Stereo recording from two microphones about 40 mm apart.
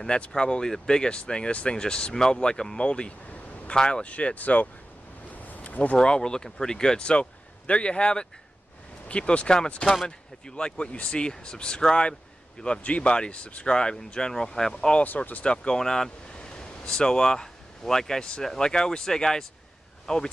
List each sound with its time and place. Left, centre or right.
0.1 s speech: left
2.8 s a sound: left
3.7 s speech: centre
4.0 s speech: left
5.3 s a sound: left
5.9 s speech: left
15.8 s speech: centre